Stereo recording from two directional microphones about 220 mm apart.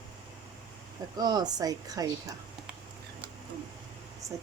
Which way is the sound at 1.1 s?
20° right (ahead or behind).